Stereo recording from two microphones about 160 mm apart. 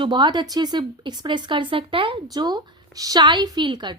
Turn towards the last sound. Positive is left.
turn(degrees=-30)  # may be behind; listen again after turning